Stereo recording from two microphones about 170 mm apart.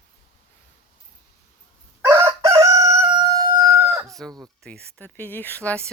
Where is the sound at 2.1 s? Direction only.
15° right (ahead or behind).